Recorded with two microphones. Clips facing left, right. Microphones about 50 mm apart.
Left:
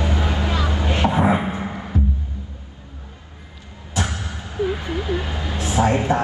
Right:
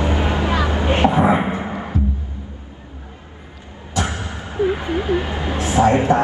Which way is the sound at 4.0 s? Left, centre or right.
Right.